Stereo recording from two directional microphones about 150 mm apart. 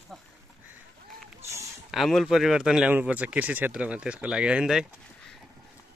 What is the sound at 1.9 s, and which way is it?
Speech, centre (ahead or behind).